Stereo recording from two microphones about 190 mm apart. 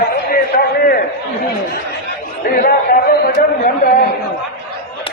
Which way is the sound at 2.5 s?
50° left (ahead or behind).